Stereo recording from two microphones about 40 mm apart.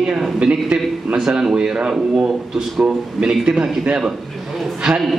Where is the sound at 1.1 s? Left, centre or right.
Centre.